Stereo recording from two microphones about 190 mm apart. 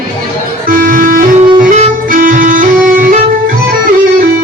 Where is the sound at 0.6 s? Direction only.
45° right (ahead or behind).